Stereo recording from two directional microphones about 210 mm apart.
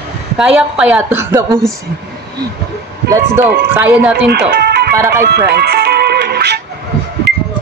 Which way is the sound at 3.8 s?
5° right (ahead or behind).